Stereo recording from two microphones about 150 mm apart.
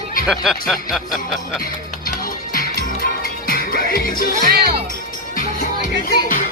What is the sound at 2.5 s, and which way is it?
Music, 75° left (ahead or behind).